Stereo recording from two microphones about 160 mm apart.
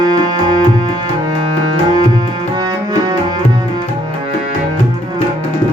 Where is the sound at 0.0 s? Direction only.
25° right (ahead or behind).